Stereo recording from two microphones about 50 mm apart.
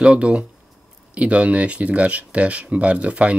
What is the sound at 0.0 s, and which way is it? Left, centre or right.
Speech, right.